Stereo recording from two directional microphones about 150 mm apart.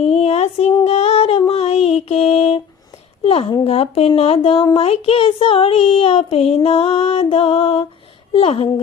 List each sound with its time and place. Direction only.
0.0 s a sound: 45° left (ahead or behind)
0.9 s female singing: 40° left (ahead or behind)
3.2 s speech: 40° left (ahead or behind)